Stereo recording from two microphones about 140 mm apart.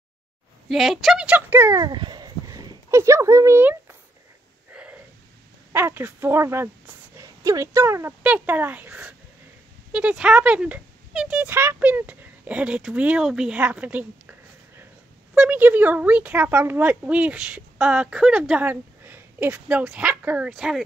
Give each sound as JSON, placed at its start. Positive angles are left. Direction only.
{"t": 0.7, "sound": "speech", "side_deg": 0}
{"t": 1.8, "sound": "speech", "side_deg": -30}
{"t": 4.7, "sound": "a sound", "side_deg": -5}
{"t": 5.7, "sound": "a woman's voice", "side_deg": -15}
{"t": 15.3, "sound": "a woman's voice", "side_deg": -10}